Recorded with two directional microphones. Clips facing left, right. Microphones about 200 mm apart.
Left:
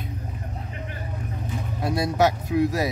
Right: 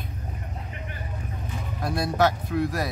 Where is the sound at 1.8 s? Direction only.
10° left (ahead or behind).